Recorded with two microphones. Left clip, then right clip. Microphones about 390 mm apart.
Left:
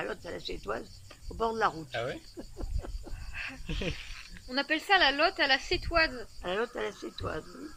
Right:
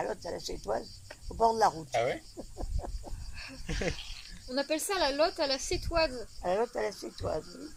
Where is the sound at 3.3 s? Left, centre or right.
Centre.